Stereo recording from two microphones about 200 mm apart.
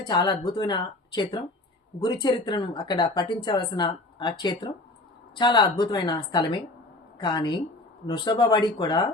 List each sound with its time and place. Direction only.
0.0 s speech: 20° left (ahead or behind)